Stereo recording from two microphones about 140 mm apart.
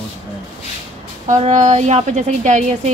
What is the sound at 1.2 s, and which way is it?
A woman's voice, 60° right (ahead or behind).